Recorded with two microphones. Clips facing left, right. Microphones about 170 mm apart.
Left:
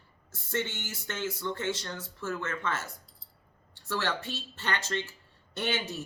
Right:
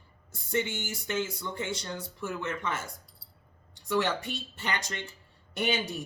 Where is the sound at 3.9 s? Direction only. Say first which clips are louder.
Right 4 dB; 15° right (ahead or behind).